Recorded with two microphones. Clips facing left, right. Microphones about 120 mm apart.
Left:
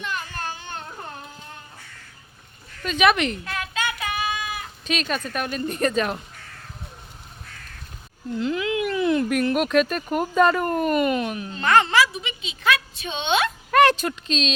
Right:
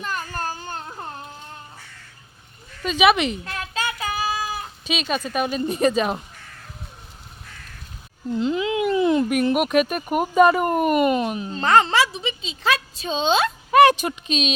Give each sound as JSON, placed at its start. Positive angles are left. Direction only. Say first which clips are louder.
{"t": 0.0, "sound": "a sound", "louder": "right 2 dB", "side_deg": -40}
{"t": 2.8, "sound": "speech", "louder": "right 2 dB", "side_deg": -15}
{"t": 3.4, "sound": "child singing", "louder": "even", "side_deg": -30}
{"t": 4.9, "sound": "speech", "louder": "right 1 dB", "side_deg": -10}
{"t": 8.4, "sound": "speech", "louder": "right 2 dB", "side_deg": -25}
{"t": 9.3, "sound": "a woman's voice", "louder": "right 1 dB", "side_deg": -10}
{"t": 13.7, "sound": "speech", "louder": "right 3 dB", "side_deg": -15}